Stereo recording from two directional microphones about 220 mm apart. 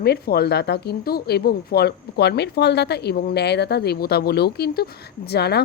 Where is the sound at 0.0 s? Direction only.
45° left (ahead or behind).